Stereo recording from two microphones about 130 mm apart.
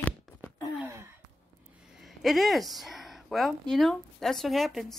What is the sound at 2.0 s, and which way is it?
Speech, centre (ahead or behind).